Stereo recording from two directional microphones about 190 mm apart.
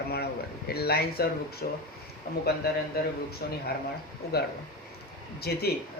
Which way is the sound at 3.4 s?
55° left (ahead or behind).